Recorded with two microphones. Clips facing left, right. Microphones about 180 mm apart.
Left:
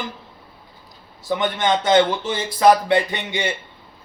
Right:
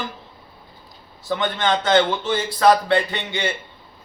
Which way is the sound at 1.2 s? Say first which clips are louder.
Left 1 dB; 15° left (ahead or behind).